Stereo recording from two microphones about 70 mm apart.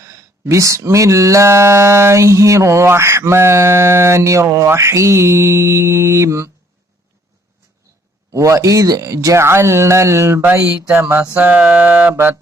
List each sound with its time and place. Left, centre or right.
0.0 s speech: right
8.3 s speech: right
10.4 s mantra: right
10.9 s mantra: right
11.3 s mantra: right
12.1 s mantra: right